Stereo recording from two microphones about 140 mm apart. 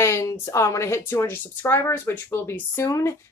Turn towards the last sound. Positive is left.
turn(degrees=20)  # may be behind; listen again after turning